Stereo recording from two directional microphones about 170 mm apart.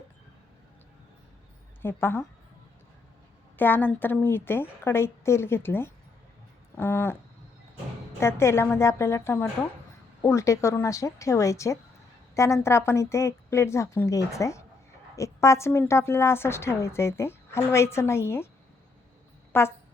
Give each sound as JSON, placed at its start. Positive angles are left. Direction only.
{"t": 1.8, "sound": "a woman's voice", "side_deg": 15}
{"t": 3.6, "sound": "a woman's voice", "side_deg": 10}
{"t": 8.2, "sound": "a woman's voice", "side_deg": 15}
{"t": 19.5, "sound": "a woman's voice", "side_deg": 15}